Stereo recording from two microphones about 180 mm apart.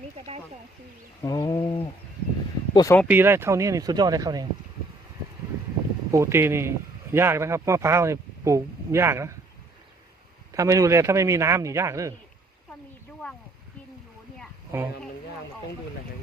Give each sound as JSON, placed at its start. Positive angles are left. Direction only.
{"t": 1.2, "sound": "bird", "side_deg": 20}
{"t": 2.7, "sound": "speech", "side_deg": 20}
{"t": 3.1, "sound": "speech", "side_deg": -10}
{"t": 6.1, "sound": "a man's voice", "side_deg": -15}
{"t": 10.5, "sound": "a man's voice", "side_deg": -15}